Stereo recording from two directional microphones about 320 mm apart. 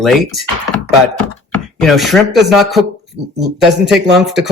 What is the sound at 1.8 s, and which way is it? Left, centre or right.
Speech, centre.